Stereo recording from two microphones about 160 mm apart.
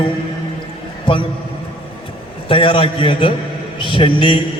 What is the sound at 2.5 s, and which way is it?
A man's voice, 35° left (ahead or behind).